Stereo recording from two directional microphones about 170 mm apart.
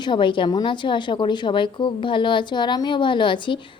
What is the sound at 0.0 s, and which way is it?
A woman's voice, 30° left (ahead or behind).